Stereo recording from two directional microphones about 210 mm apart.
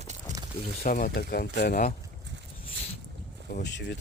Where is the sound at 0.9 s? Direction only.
40° left (ahead or behind).